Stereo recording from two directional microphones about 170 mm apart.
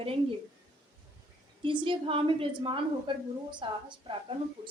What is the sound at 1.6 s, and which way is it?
A woman's voice, 30° right (ahead or behind).